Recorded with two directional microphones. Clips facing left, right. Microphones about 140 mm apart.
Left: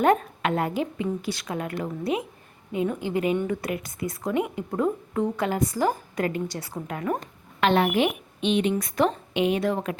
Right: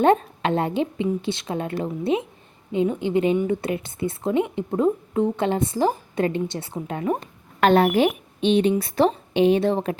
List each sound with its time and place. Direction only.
0.0 s a woman's voice: 25° right (ahead or behind)
7.6 s a woman's voice: 40° right (ahead or behind)